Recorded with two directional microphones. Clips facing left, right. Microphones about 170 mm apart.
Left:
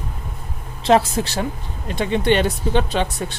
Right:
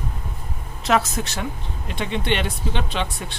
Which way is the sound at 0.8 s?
30° left (ahead or behind).